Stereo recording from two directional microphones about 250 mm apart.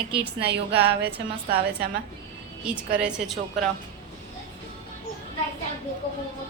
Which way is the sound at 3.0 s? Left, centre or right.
Centre.